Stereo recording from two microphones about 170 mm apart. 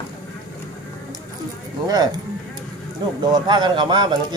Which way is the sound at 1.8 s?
25° right (ahead or behind).